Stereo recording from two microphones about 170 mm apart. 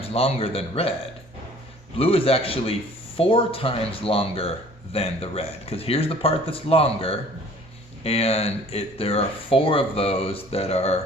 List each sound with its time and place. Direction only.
0.0 s speech: 35° left (ahead or behind)
2.0 s speech: 35° left (ahead or behind)